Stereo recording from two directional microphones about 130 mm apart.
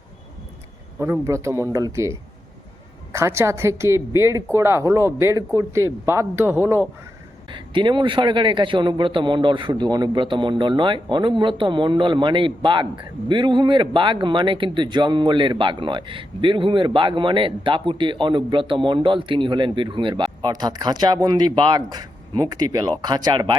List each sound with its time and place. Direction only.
0.9 s a woman's voice: 20° right (ahead or behind)
7.5 s a man's voice: 35° right (ahead or behind)